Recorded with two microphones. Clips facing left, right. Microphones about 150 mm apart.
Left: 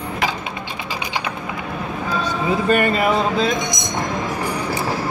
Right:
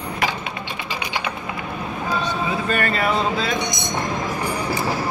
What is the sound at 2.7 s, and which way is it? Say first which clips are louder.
Speech: left 5 dB; 15° left (ahead or behind).